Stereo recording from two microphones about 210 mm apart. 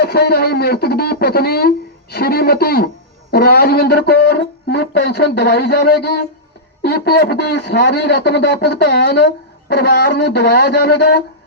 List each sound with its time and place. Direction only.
0.0 s speech: 50° left (ahead or behind)